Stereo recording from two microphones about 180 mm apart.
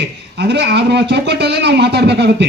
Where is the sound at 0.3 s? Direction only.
70° right (ahead or behind).